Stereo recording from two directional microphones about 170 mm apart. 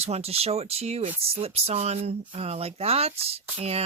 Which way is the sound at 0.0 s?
35° right (ahead or behind).